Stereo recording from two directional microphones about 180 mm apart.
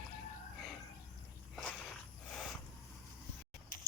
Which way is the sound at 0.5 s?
Centre (ahead or behind).